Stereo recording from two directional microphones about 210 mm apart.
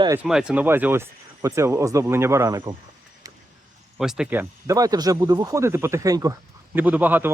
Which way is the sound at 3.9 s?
5° right (ahead or behind).